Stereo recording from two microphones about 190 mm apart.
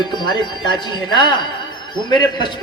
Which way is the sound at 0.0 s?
25° left (ahead or behind).